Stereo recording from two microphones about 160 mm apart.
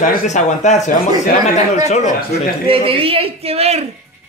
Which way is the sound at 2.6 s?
35° right (ahead or behind).